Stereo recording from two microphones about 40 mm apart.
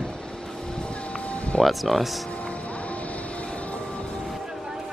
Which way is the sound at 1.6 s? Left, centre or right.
Centre.